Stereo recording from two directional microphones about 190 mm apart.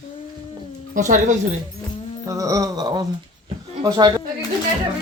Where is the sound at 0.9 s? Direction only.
40° right (ahead or behind).